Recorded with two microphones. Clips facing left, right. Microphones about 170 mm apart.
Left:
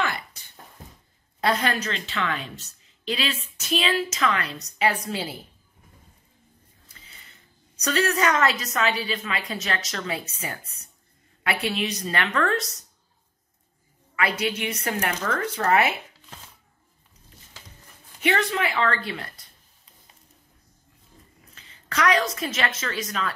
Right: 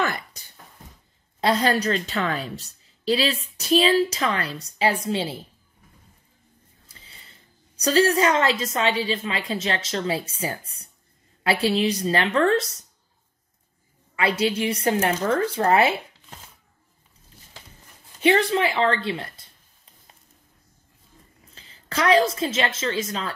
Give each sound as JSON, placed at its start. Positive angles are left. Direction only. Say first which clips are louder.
{"t": 0.0, "sound": "a sound", "louder": "right 2 dB", "side_deg": -40}
{"t": 1.4, "sound": "a woman's voice", "louder": "right 3 dB", "side_deg": -30}
{"t": 6.9, "sound": "a woman's voice", "louder": "right 1 dB", "side_deg": -30}
{"t": 14.1, "sound": "speech", "louder": "right 4 dB", "side_deg": -30}
{"t": 18.2, "sound": "speech", "louder": "right 5 dB", "side_deg": -30}
{"t": 21.5, "sound": "a woman's voice", "louder": "right 1 dB", "side_deg": -30}